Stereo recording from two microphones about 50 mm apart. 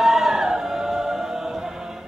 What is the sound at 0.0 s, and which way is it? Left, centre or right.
Music, centre.